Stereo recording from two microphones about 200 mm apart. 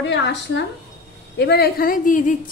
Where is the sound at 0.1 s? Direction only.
60° left (ahead or behind).